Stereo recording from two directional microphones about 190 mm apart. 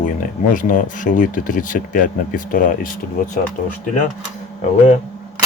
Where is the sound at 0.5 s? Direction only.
45° left (ahead or behind).